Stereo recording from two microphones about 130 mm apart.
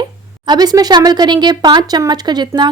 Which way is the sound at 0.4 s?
30° right (ahead or behind).